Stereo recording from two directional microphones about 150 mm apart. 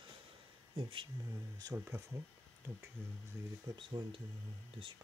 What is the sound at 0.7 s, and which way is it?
Speech, 40° right (ahead or behind).